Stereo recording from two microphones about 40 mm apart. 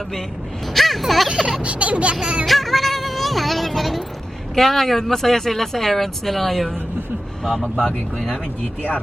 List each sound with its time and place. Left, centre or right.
0.7 s a sound: centre
1.6 s a sound: right
2.2 s music: right
2.5 s child singing: centre
4.5 s speech: centre
7.6 s speech: centre